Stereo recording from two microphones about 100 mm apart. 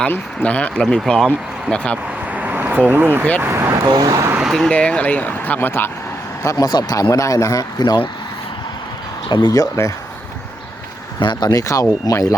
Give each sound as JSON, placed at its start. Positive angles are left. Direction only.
{"t": 0.1, "sound": "speech", "side_deg": 15}
{"t": 2.3, "sound": "vehicle", "side_deg": -15}
{"t": 3.4, "sound": "speech", "side_deg": -25}
{"t": 3.8, "sound": "speech", "side_deg": -40}
{"t": 4.4, "sound": "vehicle", "side_deg": 0}
{"t": 4.7, "sound": "speech", "side_deg": 10}
{"t": 6.4, "sound": "speech", "side_deg": 35}
{"t": 6.7, "sound": "speech", "side_deg": 45}
{"t": 9.5, "sound": "speech", "side_deg": 30}
{"t": 11.2, "sound": "speech", "side_deg": 50}